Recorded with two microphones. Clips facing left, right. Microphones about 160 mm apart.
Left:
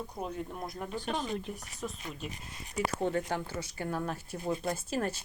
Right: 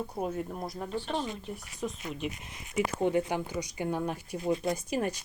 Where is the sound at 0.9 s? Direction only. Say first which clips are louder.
Right 2 dB; 45° left (ahead or behind).